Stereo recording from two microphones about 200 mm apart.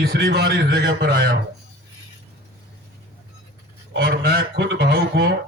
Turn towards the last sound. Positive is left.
turn(degrees=-50)  # may be behind; listen again after turning